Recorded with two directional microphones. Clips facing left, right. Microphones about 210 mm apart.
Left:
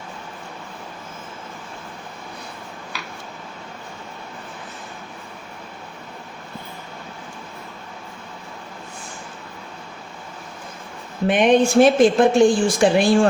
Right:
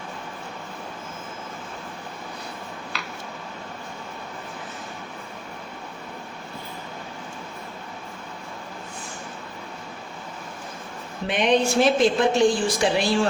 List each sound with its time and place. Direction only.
11.3 s a woman's voice: 50° left (ahead or behind)